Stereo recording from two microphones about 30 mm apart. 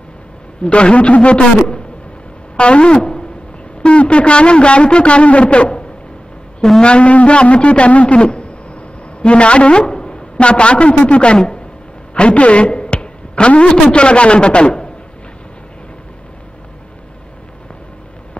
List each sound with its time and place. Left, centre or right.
0.7 s a man's voice: left
2.5 s a sound: left
3.8 s a man's voice: left
10.3 s a man's voice: left
12.1 s a sound: left
13.7 s a man's voice: left